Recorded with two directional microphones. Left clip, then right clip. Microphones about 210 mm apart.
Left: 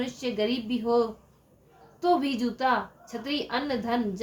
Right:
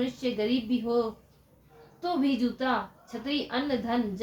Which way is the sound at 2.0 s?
40° left (ahead or behind).